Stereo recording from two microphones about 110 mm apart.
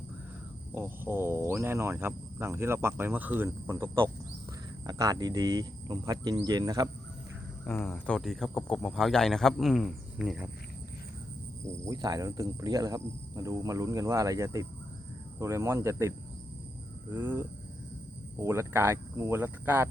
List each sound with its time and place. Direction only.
0.7 s speech: 20° right (ahead or behind)
4.9 s speech: 35° right (ahead or behind)
7.6 s speech: 15° left (ahead or behind); by 10.5 s 5° right (ahead or behind)
11.9 s speech: 30° right (ahead or behind)